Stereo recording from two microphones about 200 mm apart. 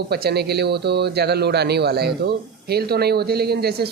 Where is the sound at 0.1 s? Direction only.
55° right (ahead or behind).